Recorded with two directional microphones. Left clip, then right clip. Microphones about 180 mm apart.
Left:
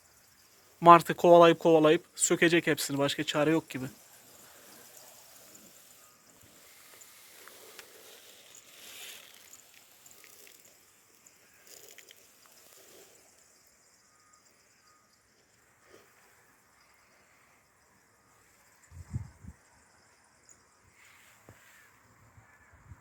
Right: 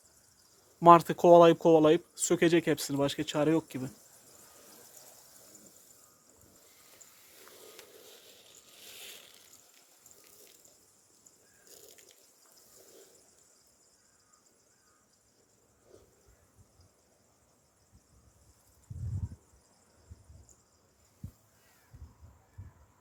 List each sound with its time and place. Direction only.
0.8 s speech: 15° right (ahead or behind)
8.0 s boat: 15° right (ahead or behind)
11.7 s a sound: 10° right (ahead or behind)